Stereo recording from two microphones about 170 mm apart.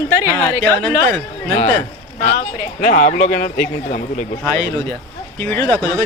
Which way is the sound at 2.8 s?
50° left (ahead or behind).